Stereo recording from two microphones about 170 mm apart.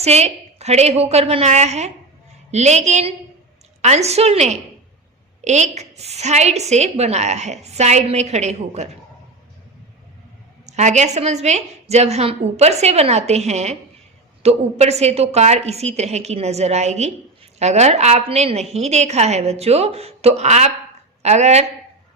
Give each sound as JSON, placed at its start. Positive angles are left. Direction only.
{"t": 0.0, "sound": "a woman's voice", "side_deg": -40}
{"t": 10.7, "sound": "a woman's voice", "side_deg": -45}